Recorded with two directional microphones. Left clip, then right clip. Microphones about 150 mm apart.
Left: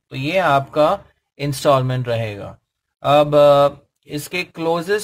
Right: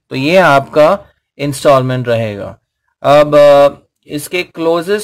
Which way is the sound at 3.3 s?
10° right (ahead or behind).